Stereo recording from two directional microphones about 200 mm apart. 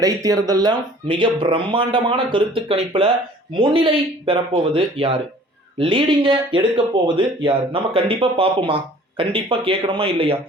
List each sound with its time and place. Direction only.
0.0 s speech: 15° right (ahead or behind)